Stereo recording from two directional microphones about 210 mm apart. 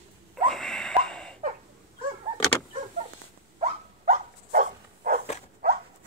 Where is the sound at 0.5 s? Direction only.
Centre (ahead or behind).